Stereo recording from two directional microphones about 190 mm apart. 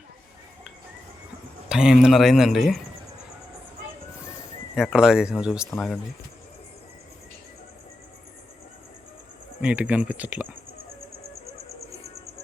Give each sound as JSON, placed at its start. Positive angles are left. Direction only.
{"t": 1.7, "sound": "speech", "side_deg": -5}
{"t": 4.7, "sound": "speech", "side_deg": -5}
{"t": 9.6, "sound": "speech", "side_deg": -5}